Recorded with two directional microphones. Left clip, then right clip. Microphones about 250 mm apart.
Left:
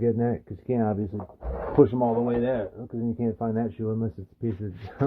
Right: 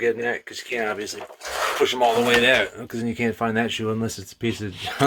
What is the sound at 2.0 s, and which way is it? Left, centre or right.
Speech, right.